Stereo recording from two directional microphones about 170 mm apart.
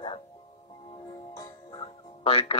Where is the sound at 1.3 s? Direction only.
25° left (ahead or behind).